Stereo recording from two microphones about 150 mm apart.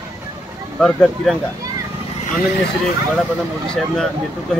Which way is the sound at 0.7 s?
5° left (ahead or behind).